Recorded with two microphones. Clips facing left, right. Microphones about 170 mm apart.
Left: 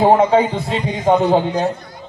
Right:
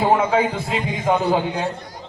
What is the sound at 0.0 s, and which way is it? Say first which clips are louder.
A man's voice: left 5 dB; 35° left (ahead or behind).